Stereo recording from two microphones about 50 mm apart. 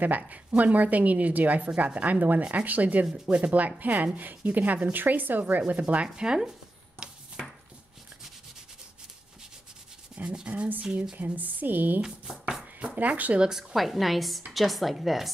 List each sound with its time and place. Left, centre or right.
0.3 s speech: right
6.1 s speech: centre
10.2 s speech: right
11.3 s speech: right
12.0 s speech: centre
12.8 s speech: right
13.5 s a woman's voice: centre